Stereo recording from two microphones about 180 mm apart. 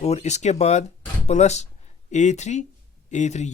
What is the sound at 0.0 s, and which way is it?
Speech, 35° left (ahead or behind).